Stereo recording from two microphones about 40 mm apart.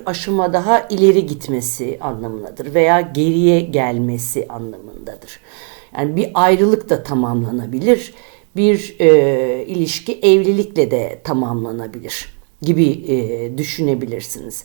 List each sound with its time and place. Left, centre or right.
0.0 s speech: centre
1.9 s a woman's voice: centre
2.4 s speech: centre
6.1 s speech: centre